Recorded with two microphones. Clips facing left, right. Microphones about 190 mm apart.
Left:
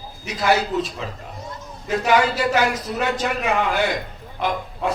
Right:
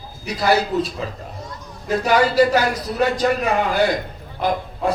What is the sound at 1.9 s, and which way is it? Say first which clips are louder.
A man's voice: right 1 dB; 35° right (ahead or behind).